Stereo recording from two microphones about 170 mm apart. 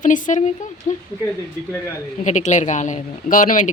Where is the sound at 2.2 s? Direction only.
45° left (ahead or behind).